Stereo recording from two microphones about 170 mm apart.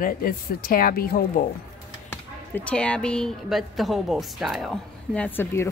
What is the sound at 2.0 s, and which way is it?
A woman's voice, 10° left (ahead or behind).